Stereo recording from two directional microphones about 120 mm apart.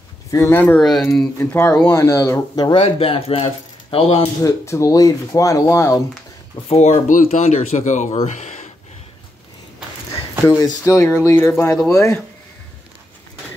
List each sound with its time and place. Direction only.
0.3 s speech: 20° left (ahead or behind)
2.6 s speech: 50° left (ahead or behind)
4.4 s speech: 25° left (ahead or behind)
6.7 s speech: 80° left
8.3 s a sound: 85° left
10.4 s speech: 25° left (ahead or behind)